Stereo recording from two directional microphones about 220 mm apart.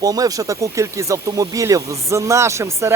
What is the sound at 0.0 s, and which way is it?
Speech, 15° right (ahead or behind).